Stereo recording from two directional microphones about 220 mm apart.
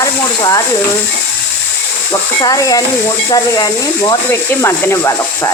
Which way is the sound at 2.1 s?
15° left (ahead or behind).